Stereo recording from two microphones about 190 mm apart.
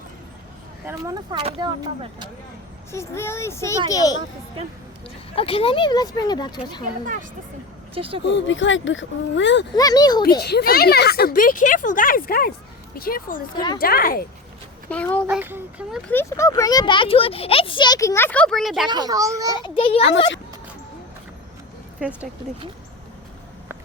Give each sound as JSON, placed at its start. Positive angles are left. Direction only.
{"t": 0.9, "sound": "a child's voice", "side_deg": -15}
{"t": 1.4, "sound": "speech", "side_deg": -30}
{"t": 2.9, "sound": "a child's voice", "side_deg": 15}
{"t": 5.3, "sound": "speech", "side_deg": 30}
{"t": 7.9, "sound": "speech", "side_deg": -30}
{"t": 8.2, "sound": "speech", "side_deg": 70}
{"t": 9.7, "sound": "speech", "side_deg": 20}
{"t": 10.4, "sound": "speech", "side_deg": 55}
{"t": 14.8, "sound": "a child's voice", "side_deg": 10}
{"t": 15.3, "sound": "a child's voice", "side_deg": -10}
{"t": 16.1, "sound": "speech", "side_deg": 15}
{"t": 18.9, "sound": "speech", "side_deg": -20}
{"t": 19.5, "sound": "speech", "side_deg": 25}